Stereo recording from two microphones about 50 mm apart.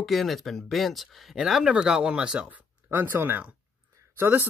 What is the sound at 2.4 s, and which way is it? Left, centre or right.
Speech, right.